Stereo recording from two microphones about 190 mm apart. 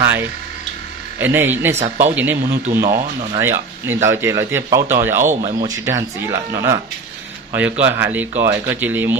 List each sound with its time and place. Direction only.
1.2 s speech: 10° right (ahead or behind)